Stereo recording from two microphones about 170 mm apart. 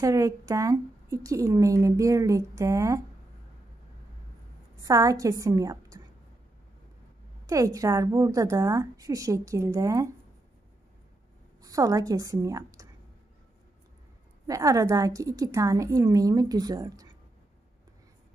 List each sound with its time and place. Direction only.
0.0 s speech: 20° right (ahead or behind)
4.8 s speech: 20° right (ahead or behind)
7.4 s speech: 20° right (ahead or behind)
11.6 s a woman's voice: 20° right (ahead or behind)
14.5 s speech: 20° right (ahead or behind)